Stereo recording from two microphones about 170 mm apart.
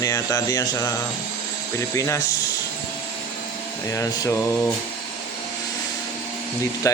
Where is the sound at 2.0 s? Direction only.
15° left (ahead or behind).